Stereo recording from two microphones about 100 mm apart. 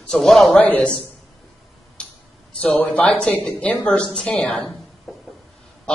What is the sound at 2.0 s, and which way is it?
Tick-tock, 10° left (ahead or behind).